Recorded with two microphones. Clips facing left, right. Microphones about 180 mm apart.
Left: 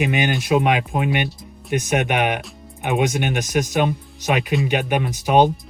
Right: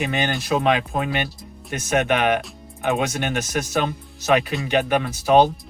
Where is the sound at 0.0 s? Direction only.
15° left (ahead or behind).